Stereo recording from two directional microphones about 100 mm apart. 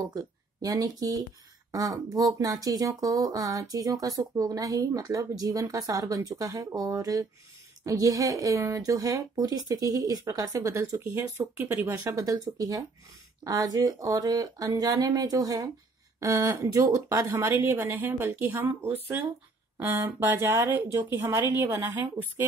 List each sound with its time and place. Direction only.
0.1 s speech: 40° right (ahead or behind)
11.1 s speech: 20° right (ahead or behind)
12.0 s speech: 35° right (ahead or behind)